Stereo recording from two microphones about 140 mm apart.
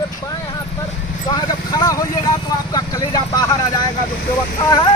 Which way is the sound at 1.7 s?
25° left (ahead or behind).